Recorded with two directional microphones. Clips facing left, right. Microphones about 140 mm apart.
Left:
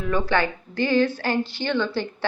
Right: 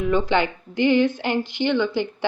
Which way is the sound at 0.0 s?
20° right (ahead or behind).